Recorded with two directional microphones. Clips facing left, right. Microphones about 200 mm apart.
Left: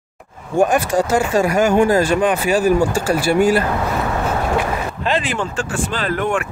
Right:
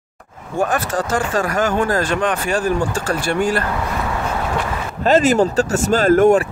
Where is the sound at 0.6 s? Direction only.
15° left (ahead or behind).